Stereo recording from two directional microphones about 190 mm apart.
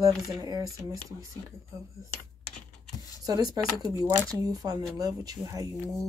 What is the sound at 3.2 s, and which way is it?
Speech, 20° right (ahead or behind).